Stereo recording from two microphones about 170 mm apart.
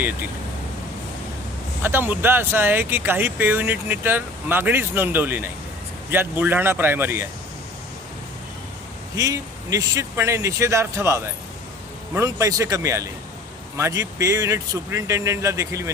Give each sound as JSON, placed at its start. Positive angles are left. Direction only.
{"t": 1.8, "sound": "speech", "side_deg": -15}
{"t": 9.1, "sound": "a man's voice", "side_deg": -20}